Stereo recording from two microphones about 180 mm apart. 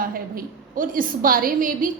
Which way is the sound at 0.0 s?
50° right (ahead or behind).